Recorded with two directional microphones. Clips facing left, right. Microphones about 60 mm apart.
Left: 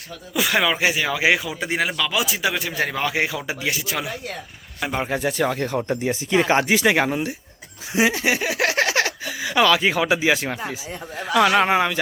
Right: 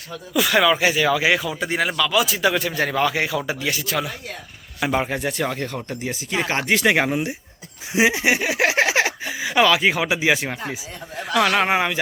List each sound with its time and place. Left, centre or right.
0.3 s a man's voice: centre
4.8 s speech: centre
7.9 s a sound: centre
9.6 s speech: centre
11.7 s speech: centre